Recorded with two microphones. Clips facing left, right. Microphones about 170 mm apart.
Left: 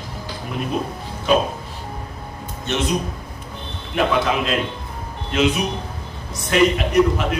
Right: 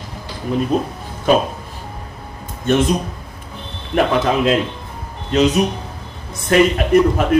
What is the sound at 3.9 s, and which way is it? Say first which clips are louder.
Speech: right 4 dB; 45° right (ahead or behind).